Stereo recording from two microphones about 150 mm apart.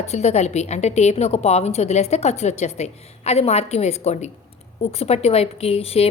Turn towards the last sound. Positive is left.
turn(degrees=40)  # may be behind; listen again after turning